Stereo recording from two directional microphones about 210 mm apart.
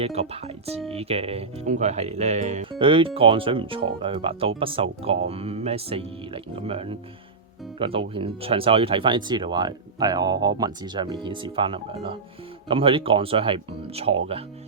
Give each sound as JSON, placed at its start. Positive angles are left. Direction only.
{"t": 0.0, "sound": "speech", "side_deg": -30}